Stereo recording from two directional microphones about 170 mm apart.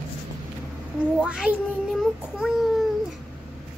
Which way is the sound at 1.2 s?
5° right (ahead or behind).